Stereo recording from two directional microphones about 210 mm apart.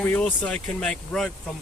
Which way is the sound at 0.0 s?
5° left (ahead or behind).